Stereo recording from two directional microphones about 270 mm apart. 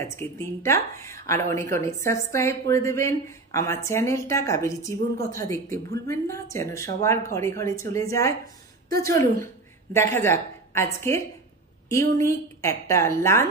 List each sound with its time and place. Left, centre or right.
0.0 s speech: centre
8.8 s a woman's voice: right
9.9 s speech: centre